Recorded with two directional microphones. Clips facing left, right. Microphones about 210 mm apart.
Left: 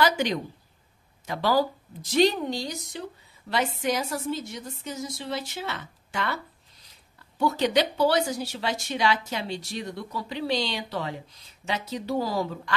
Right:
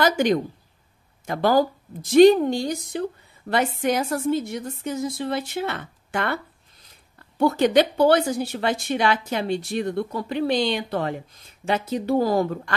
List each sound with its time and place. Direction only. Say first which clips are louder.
0.0 s a woman's voice: right 5 dB; 50° right (ahead or behind)